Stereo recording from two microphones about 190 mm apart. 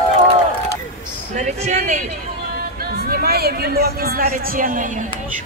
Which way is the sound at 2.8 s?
55° right (ahead or behind).